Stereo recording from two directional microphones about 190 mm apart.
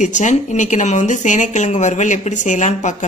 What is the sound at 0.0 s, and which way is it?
A woman's voice, 40° left (ahead or behind).